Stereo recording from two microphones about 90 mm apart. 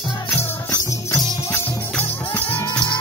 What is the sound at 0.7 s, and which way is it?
Music, 40° left (ahead or behind).